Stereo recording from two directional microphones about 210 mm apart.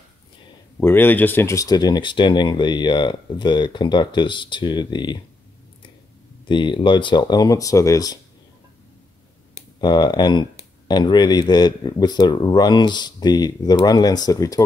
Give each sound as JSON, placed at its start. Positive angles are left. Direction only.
{"t": 0.7, "sound": "speech", "side_deg": 10}
{"t": 6.4, "sound": "speech", "side_deg": 20}
{"t": 9.8, "sound": "speech", "side_deg": 20}